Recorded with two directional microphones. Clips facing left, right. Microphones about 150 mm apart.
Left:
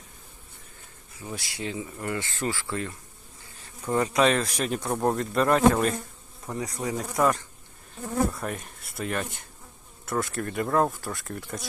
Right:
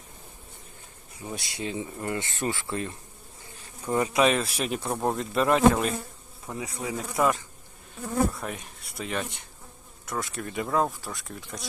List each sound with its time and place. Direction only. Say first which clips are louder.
1.2 s speech: even; 25° right (ahead or behind)
3.8 s speech: even; 10° right (ahead or behind)